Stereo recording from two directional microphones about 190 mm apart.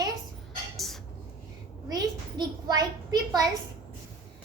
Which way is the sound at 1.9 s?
20° right (ahead or behind).